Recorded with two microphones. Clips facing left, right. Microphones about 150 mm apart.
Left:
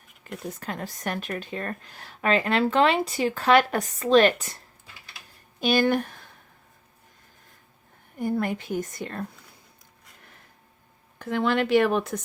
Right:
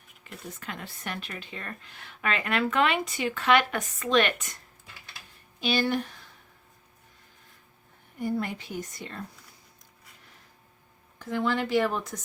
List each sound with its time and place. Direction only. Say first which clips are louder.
0.3 s speech: left 6 dB; 40° left (ahead or behind)
5.5 s a woman's voice: left 5 dB; 50° left (ahead or behind)
8.2 s a woman's voice: left 4 dB; 50° left (ahead or behind)
11.2 s speech: left 4 dB; 70° left (ahead or behind)